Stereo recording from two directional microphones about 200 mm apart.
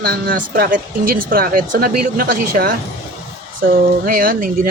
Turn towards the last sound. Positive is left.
turn(degrees=-45)  # may be behind; listen again after turning